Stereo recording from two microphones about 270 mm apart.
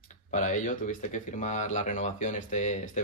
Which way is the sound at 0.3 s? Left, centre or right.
Left.